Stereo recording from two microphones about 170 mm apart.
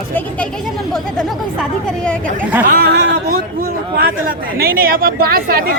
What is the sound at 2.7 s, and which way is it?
Speech, 65° right (ahead or behind).